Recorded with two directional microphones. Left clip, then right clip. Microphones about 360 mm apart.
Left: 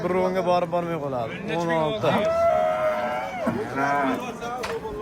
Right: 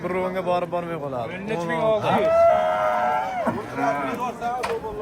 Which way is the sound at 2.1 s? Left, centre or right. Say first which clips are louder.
Right 4 dB; centre.